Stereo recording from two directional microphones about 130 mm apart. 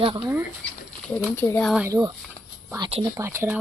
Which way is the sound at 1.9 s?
30° right (ahead or behind).